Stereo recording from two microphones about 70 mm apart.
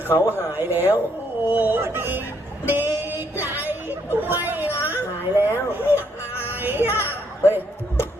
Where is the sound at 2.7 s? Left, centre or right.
Right.